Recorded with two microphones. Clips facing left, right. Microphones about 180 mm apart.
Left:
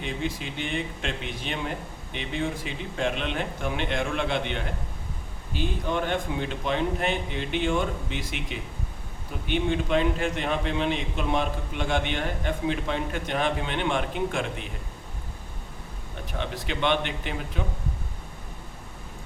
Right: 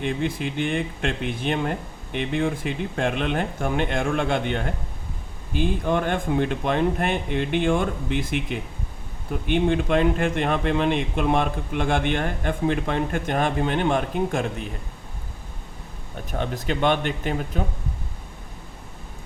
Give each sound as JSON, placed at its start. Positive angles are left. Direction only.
{"t": 0.0, "sound": "a man's voice", "side_deg": -55}
{"t": 16.4, "sound": "a man's voice", "side_deg": -45}